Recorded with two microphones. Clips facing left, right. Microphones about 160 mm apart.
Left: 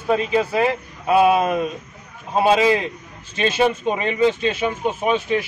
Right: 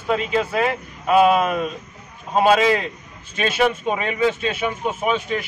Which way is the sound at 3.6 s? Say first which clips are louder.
Even; 25° left (ahead or behind).